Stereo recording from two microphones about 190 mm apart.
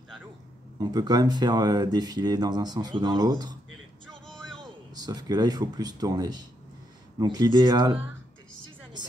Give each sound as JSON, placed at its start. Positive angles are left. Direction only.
{"t": 0.7, "sound": "speech", "side_deg": -20}
{"t": 4.1, "sound": "vehicle", "side_deg": 5}
{"t": 4.9, "sound": "speech", "side_deg": -20}